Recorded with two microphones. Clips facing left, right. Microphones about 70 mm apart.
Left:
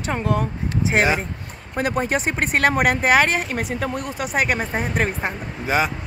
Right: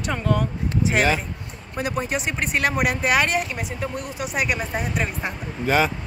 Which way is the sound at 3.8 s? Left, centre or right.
Left.